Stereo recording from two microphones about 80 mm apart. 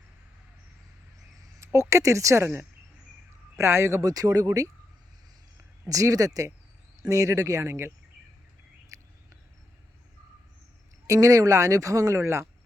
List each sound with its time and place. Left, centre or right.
1.4 s speech: right
4.1 s speech: right
5.9 s speech: right
8.9 s a sound: right
11.0 s speech: right